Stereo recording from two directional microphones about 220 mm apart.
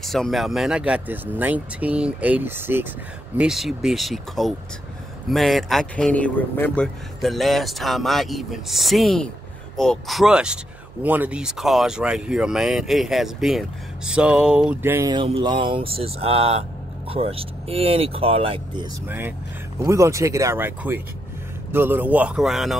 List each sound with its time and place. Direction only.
0.0 s speech: centre (ahead or behind); by 18.9 s 25° right (ahead or behind)
19.0 s speech: 10° right (ahead or behind)